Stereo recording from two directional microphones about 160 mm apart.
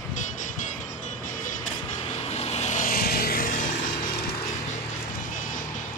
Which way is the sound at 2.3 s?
40° left (ahead or behind).